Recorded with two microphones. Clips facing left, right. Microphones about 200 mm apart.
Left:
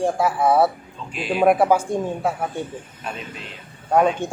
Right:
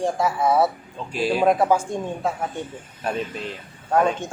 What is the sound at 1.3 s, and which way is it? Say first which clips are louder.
Speech: left 3 dB; 10° left (ahead or behind).